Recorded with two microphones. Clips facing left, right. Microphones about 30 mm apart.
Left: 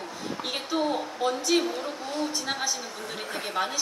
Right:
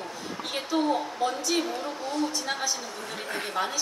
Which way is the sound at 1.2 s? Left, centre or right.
Centre.